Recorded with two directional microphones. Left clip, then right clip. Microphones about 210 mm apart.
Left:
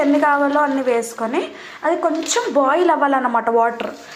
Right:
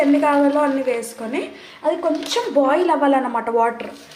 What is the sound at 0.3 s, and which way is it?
A woman's voice, 5° left (ahead or behind).